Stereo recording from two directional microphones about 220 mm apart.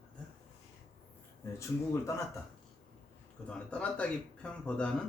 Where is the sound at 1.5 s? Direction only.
15° left (ahead or behind).